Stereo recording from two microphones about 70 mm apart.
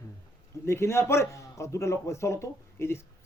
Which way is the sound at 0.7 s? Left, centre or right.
Left.